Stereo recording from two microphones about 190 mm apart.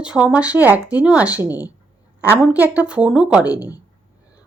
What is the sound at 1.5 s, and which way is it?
Speech, 20° left (ahead or behind).